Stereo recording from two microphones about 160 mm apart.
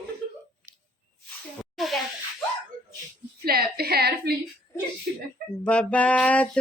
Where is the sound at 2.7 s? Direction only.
55° right (ahead or behind).